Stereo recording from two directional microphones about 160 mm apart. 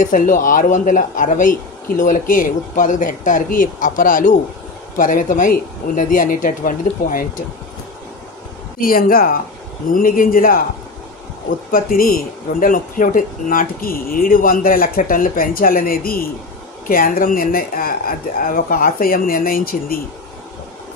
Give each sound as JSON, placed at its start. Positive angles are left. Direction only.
{"t": 0.0, "sound": "speech", "side_deg": 55}
{"t": 8.8, "sound": "speech", "side_deg": 65}
{"t": 11.7, "sound": "speech", "side_deg": 60}